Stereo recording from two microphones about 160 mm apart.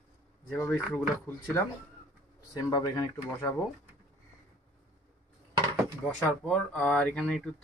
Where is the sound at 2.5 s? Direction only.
20° left (ahead or behind).